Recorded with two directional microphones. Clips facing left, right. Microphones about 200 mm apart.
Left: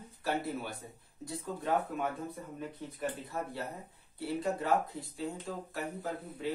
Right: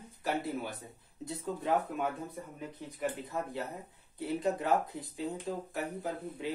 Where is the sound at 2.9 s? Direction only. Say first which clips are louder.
Right 2 dB; 15° right (ahead or behind).